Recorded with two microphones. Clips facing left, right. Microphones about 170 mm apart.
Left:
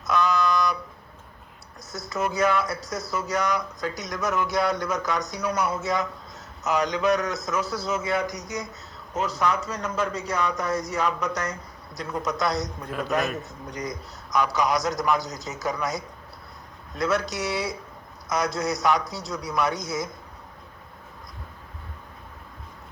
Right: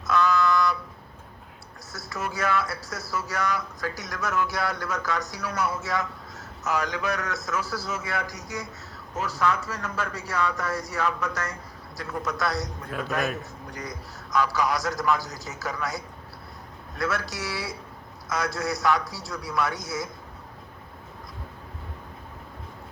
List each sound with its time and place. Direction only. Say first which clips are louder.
0.1 s a sound: even; 20° left (ahead or behind)
1.9 s speech: left 5 dB; 20° left (ahead or behind)
13.1 s a man's voice: left 2 dB; centre (ahead or behind)
13.4 s speech: left 4 dB; 20° left (ahead or behind)